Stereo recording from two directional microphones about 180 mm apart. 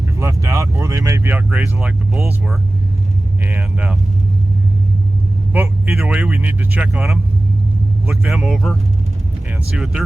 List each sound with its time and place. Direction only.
0.2 s speech: 15° right (ahead or behind)
3.4 s speech: 5° right (ahead or behind)
5.5 s speech: 5° right (ahead or behind)
8.0 s speech: 15° right (ahead or behind)
8.3 s speech: centre (ahead or behind)